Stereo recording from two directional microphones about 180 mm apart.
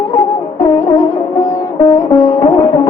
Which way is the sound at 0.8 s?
15° left (ahead or behind).